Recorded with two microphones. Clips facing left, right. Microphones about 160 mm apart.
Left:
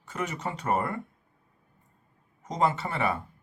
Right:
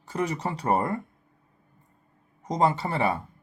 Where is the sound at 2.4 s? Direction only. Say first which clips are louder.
Right 3 dB; 35° right (ahead or behind).